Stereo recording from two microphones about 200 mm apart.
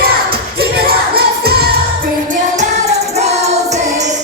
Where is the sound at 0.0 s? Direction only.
50° right (ahead or behind).